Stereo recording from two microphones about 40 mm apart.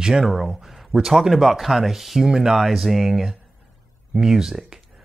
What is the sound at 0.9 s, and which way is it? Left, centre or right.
Speech, centre.